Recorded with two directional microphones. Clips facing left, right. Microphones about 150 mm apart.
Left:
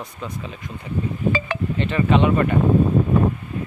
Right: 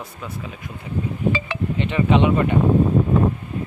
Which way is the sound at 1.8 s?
15° right (ahead or behind).